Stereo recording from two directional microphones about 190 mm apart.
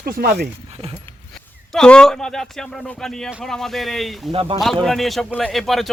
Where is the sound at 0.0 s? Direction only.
55° right (ahead or behind).